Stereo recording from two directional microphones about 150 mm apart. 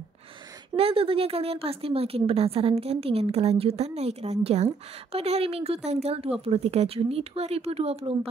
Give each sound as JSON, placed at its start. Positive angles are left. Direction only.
{"t": 0.7, "sound": "speech", "side_deg": -40}